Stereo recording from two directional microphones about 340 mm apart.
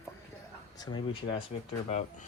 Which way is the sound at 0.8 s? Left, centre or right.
Centre.